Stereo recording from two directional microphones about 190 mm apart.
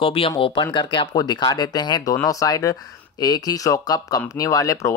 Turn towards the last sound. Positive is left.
turn(degrees=15)  # may be behind; listen again after turning